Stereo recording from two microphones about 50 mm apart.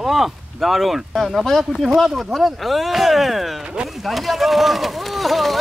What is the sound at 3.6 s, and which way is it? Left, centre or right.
Speech, centre.